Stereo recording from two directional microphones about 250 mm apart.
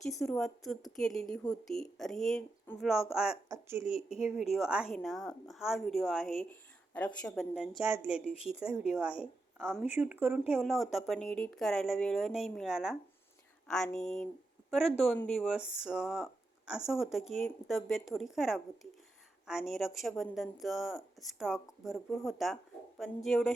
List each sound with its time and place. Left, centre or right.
0.0 s speech: centre
3.8 s speech: left
4.2 s speech: centre